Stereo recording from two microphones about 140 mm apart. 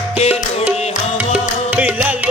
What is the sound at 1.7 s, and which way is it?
Music, 10° right (ahead or behind).